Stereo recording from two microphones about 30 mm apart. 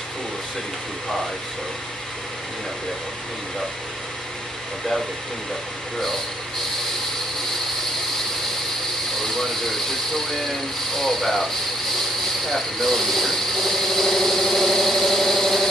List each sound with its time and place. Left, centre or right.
9.2 s speech: centre